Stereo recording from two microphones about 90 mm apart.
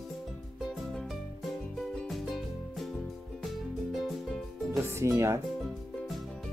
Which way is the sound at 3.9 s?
Centre (ahead or behind).